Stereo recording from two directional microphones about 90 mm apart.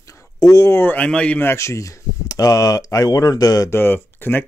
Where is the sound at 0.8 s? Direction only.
20° left (ahead or behind).